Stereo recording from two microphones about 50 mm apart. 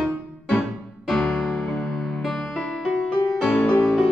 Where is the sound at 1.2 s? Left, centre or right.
Centre.